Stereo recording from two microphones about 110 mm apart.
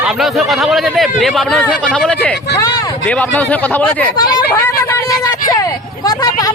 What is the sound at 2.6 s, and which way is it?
Speech, 35° left (ahead or behind).